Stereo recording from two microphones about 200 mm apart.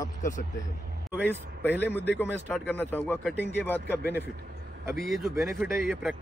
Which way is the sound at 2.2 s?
5° right (ahead or behind).